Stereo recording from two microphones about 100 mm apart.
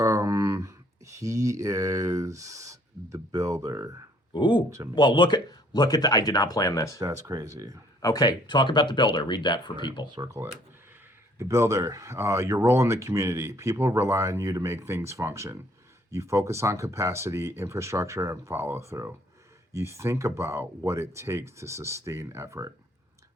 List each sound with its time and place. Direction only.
0.0 s a sound: 30° right (ahead or behind)
1.1 s speech: 30° right (ahead or behind)
4.3 s speech: 55° left (ahead or behind); by 7.0 s 35° left (ahead or behind)
7.0 s speech: 30° right (ahead or behind)
8.0 s speech: 40° left (ahead or behind)
11.3 s speech: 30° right (ahead or behind)